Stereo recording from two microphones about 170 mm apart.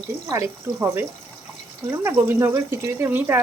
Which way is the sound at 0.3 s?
15° right (ahead or behind).